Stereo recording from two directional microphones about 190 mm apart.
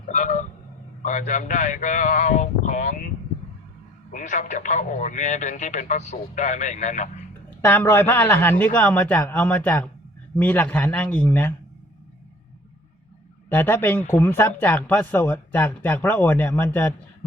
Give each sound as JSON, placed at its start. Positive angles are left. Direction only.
{"t": 0.1, "sound": "vehicle", "side_deg": 40}
{"t": 1.0, "sound": "speech", "side_deg": 40}
{"t": 4.1, "sound": "speech", "side_deg": 40}
{"t": 7.6, "sound": "a man's voice", "side_deg": 10}
{"t": 13.5, "sound": "a man's voice", "side_deg": 10}